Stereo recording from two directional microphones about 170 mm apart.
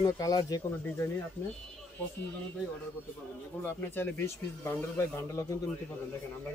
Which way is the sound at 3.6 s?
10° left (ahead or behind).